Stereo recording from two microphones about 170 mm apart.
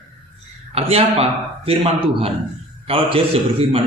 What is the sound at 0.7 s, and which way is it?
A man's voice, 35° right (ahead or behind).